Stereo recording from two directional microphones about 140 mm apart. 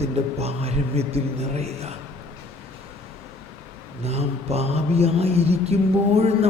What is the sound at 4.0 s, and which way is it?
Speech, 50° right (ahead or behind).